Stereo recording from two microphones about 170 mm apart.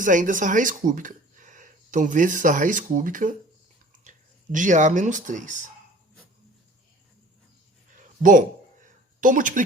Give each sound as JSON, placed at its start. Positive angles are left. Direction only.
{"t": 0.0, "sound": "speech", "side_deg": -50}
{"t": 4.5, "sound": "speech", "side_deg": -50}
{"t": 8.0, "sound": "a sound", "side_deg": -50}
{"t": 9.2, "sound": "speech", "side_deg": -50}